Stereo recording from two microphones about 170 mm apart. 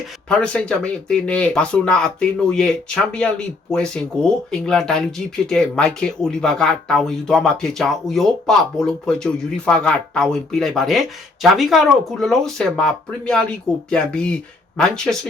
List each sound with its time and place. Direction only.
0.3 s speech: 5° left (ahead or behind)